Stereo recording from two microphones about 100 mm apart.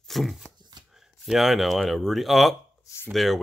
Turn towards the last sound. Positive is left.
turn(degrees=0)  # may be behind; listen again after turning